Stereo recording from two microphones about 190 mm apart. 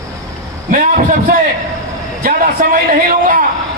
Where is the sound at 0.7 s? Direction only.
45° right (ahead or behind).